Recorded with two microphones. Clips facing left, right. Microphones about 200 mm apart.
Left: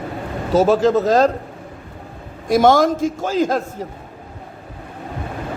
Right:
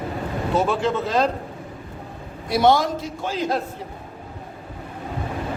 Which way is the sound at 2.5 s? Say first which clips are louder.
Left 5 dB; 45° left (ahead or behind).